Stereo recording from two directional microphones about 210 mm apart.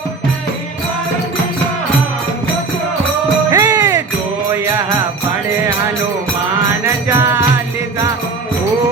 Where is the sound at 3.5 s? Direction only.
15° right (ahead or behind).